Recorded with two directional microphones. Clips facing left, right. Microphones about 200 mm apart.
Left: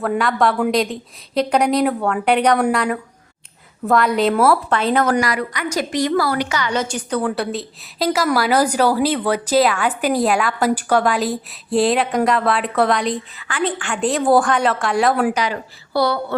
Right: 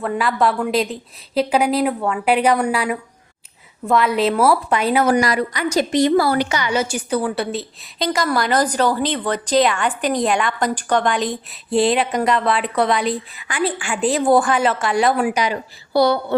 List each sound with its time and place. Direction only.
0.0 s a woman's voice: centre (ahead or behind)
5.2 s a woman's voice: 30° right (ahead or behind)
6.6 s a woman's voice: 10° right (ahead or behind)
15.3 s a woman's voice: 15° right (ahead or behind)